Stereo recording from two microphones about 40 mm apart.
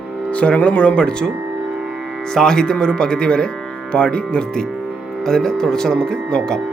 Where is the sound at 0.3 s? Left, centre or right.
Left.